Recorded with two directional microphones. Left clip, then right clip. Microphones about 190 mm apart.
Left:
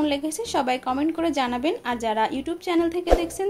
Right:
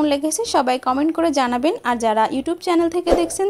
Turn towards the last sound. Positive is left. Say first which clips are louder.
# right 4 dB
turn(degrees=-35)  # may be behind; listen again after turning